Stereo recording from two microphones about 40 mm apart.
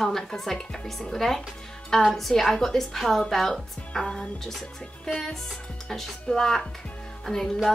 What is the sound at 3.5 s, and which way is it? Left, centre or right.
A woman's voice, centre.